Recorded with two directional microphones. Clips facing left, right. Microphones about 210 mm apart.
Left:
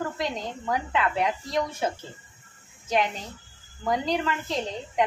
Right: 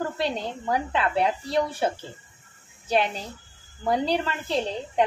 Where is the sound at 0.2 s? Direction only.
30° right (ahead or behind).